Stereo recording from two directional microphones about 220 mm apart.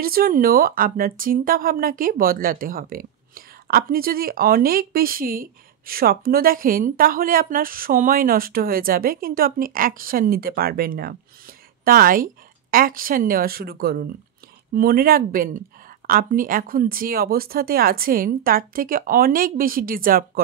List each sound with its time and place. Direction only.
0.0 s a woman's voice: 40° right (ahead or behind)